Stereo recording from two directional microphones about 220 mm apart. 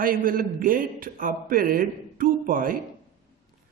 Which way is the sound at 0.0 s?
40° right (ahead or behind).